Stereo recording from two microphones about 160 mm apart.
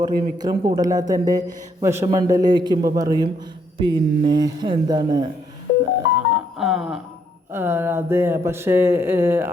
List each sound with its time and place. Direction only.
0.0 s speech: 25° right (ahead or behind)
6.3 s music: centre (ahead or behind)
7.5 s speech: 15° right (ahead or behind)